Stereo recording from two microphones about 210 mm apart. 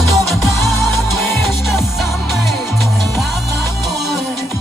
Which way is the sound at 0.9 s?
10° left (ahead or behind).